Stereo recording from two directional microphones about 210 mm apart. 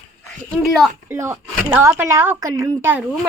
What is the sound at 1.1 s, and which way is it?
Speech, 15° right (ahead or behind).